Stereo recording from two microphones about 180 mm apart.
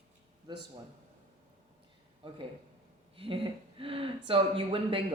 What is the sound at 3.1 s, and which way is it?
A woman's voice, 30° right (ahead or behind).